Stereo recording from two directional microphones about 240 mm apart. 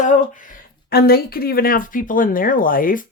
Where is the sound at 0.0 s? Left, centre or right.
Left.